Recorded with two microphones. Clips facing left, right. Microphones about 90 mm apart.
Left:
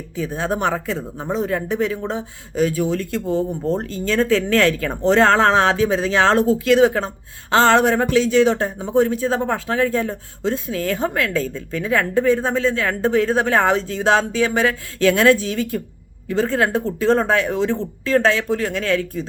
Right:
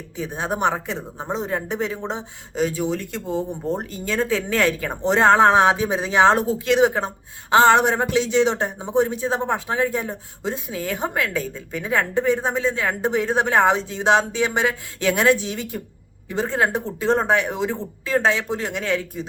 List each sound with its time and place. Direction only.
0.2 s speech: 20° right (ahead or behind)